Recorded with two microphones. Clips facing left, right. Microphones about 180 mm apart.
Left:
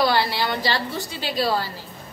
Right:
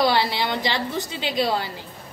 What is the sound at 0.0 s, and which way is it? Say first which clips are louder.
Speech: even; 20° right (ahead or behind).